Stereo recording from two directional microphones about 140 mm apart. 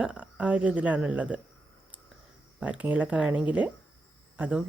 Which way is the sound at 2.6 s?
10° right (ahead or behind).